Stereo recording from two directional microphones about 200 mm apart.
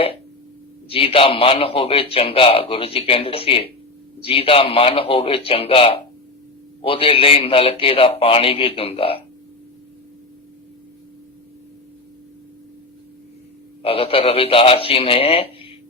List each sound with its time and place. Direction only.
0.9 s a man's voice: 30° left (ahead or behind)
13.8 s a man's voice: 30° left (ahead or behind)